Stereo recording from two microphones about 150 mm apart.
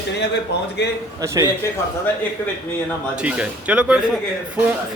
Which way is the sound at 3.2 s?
10° right (ahead or behind).